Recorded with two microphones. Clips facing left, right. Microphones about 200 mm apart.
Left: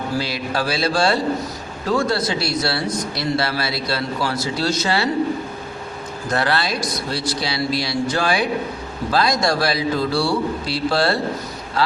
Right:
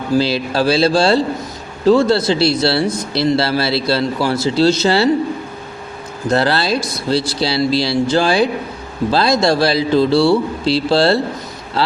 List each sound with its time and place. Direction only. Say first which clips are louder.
0.2 s speech: right 7 dB; 30° right (ahead or behind)
6.3 s speech: right 6 dB; 30° right (ahead or behind)